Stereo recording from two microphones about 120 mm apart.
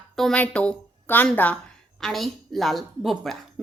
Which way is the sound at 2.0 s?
Centre (ahead or behind).